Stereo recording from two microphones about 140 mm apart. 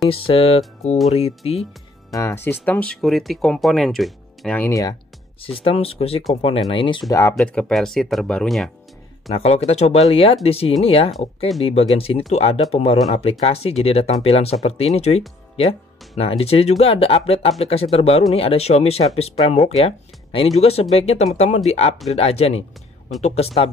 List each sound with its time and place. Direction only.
0.1 s speech: 40° left (ahead or behind)
2.1 s speech: 20° left (ahead or behind); by 4.6 s centre (ahead or behind)
4.6 s speech: 20° left (ahead or behind)
5.4 s speech: 40° left (ahead or behind)
7.1 s speech: 20° left (ahead or behind)
7.3 s speech: 5° left (ahead or behind)
9.3 s speech: 50° left (ahead or behind)
11.1 s speech: centre (ahead or behind)
11.6 s speech: 45° left (ahead or behind)